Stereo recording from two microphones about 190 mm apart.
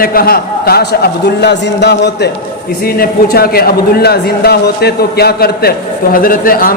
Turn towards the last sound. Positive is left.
turn(degrees=50)  # may be behind; listen again after turning